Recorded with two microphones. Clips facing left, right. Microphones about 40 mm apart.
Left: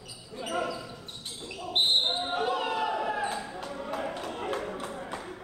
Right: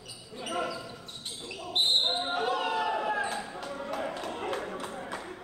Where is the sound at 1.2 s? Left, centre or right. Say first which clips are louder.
Left 1 dB; centre.